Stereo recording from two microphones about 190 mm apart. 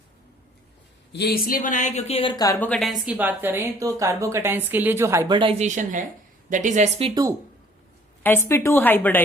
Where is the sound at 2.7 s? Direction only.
Centre (ahead or behind); by 7.1 s 35° right (ahead or behind).